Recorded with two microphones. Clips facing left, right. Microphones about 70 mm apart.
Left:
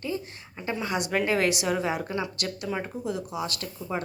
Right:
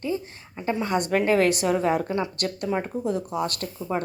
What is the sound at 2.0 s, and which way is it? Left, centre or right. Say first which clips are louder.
Speech: right 4 dB; right.